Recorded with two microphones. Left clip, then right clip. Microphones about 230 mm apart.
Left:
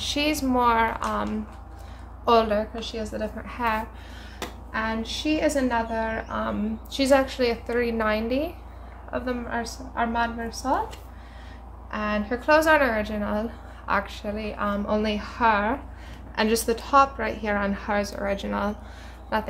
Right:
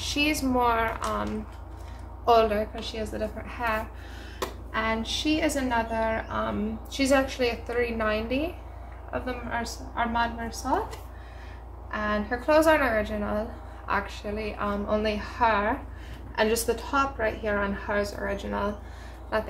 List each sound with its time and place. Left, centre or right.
0.0 s a woman's voice: left
4.4 s a sound: left
5.4 s a woman's voice: left
11.9 s a woman's voice: left